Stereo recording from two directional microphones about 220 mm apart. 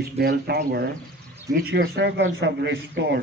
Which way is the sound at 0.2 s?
45° right (ahead or behind).